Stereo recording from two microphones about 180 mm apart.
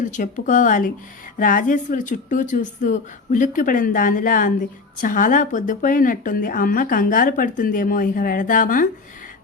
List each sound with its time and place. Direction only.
0.0 s a woman's voice: 45° left (ahead or behind)